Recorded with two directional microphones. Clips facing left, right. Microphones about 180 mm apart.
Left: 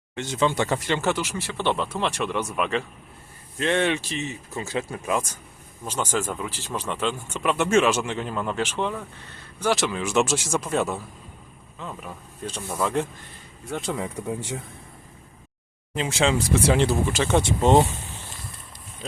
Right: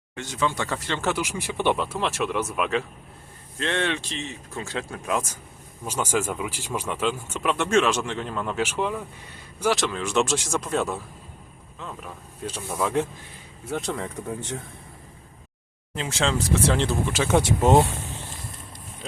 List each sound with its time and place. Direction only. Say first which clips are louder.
0.2 s speech: left 4 dB; 25° left (ahead or behind)
1.0 s speech: left 1 dB; 10° right (ahead or behind)
5.8 s speech: right 1 dB; 10° right (ahead or behind)
9.7 s speech: left 1 dB; 5° left (ahead or behind)
16.0 s speech: left 3 dB; 10° left (ahead or behind); by 17.7 s 10° right (ahead or behind)